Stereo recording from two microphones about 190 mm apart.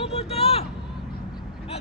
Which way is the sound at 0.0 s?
35° left (ahead or behind).